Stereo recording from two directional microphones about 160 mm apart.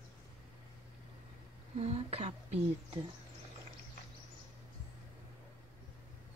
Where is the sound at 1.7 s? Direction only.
40° right (ahead or behind).